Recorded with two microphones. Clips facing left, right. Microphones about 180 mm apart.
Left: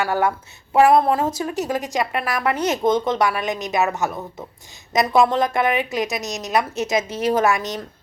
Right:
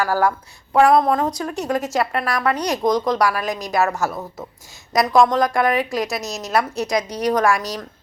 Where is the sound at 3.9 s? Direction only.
Centre (ahead or behind).